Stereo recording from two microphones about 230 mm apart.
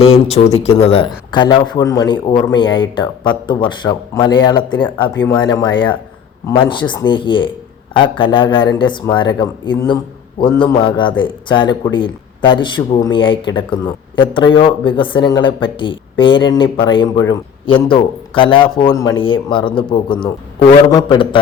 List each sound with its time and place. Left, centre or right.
0.4 s speech: left